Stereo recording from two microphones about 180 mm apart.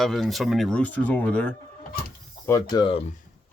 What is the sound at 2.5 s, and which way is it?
Speech, 20° left (ahead or behind).